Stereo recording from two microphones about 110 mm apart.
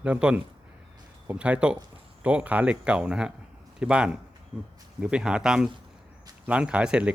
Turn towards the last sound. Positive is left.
turn(degrees=-10)  # may be behind; listen again after turning